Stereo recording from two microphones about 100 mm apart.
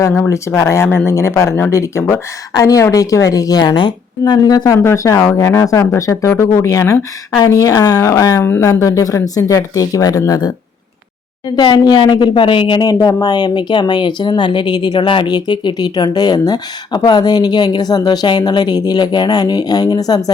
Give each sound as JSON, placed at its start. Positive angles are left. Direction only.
{"t": 0.3, "sound": "speech", "side_deg": 30}
{"t": 8.4, "sound": "speech", "side_deg": 20}
{"t": 12.9, "sound": "speech", "side_deg": 40}